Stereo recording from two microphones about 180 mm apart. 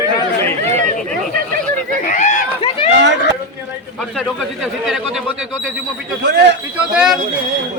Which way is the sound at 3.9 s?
5° left (ahead or behind).